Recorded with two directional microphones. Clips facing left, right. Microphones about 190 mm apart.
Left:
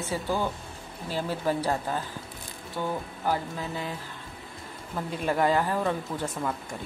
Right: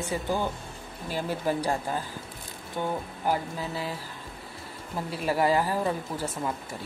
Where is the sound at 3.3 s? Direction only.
5° right (ahead or behind).